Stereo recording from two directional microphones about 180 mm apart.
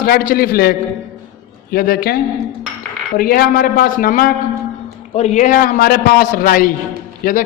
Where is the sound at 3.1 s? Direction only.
55° left (ahead or behind).